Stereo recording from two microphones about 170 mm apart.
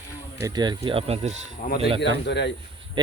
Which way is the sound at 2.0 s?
90° left.